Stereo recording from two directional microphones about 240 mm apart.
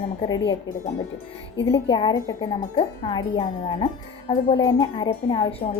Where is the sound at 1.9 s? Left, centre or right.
Centre.